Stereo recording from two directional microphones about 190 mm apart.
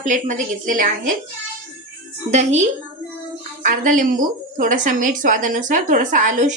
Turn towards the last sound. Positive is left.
turn(degrees=-40)  # may be behind; listen again after turning